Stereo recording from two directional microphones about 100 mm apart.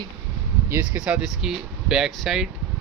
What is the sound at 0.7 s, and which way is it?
Speech, 15° right (ahead or behind).